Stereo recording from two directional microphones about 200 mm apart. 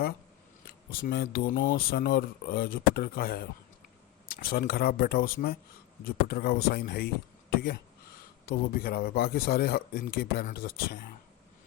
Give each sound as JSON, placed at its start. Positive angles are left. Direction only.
{"t": 0.7, "sound": "speech", "side_deg": 50}